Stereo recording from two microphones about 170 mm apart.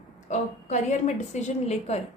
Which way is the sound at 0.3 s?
45° left (ahead or behind).